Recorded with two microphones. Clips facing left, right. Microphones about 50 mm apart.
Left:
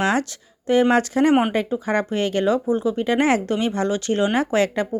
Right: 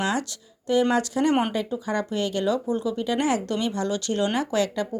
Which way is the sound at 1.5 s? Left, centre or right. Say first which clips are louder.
Left 5 dB; left.